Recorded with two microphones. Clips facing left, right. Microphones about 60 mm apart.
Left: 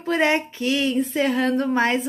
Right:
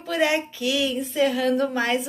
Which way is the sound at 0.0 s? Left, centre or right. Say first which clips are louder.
Left 2 dB; left.